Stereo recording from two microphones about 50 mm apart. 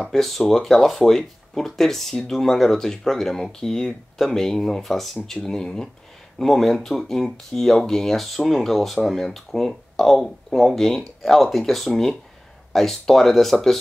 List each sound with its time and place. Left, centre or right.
0.0 s speech: centre